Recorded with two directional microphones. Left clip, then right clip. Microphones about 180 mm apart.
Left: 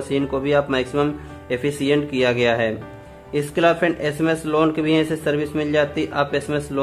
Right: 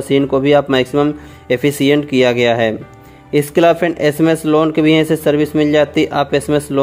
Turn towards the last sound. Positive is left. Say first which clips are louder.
# right 7 dB
turn(degrees=-40)  # may be behind; listen again after turning